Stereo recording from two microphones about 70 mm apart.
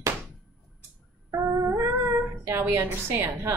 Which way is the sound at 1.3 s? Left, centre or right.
Right.